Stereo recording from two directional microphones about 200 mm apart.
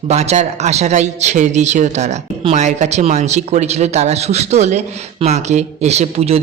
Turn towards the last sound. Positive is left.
turn(degrees=-30)  # may be behind; listen again after turning